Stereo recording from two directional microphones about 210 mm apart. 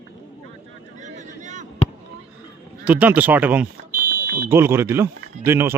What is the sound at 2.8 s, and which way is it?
Speech, 5° right (ahead or behind).